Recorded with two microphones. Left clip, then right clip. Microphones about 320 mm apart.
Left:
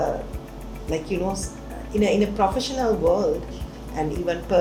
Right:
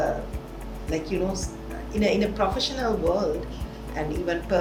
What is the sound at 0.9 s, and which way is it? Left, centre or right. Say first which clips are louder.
A woman's voice: left 2 dB; left.